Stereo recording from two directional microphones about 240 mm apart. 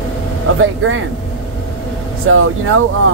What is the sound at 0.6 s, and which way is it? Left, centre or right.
Speech, right.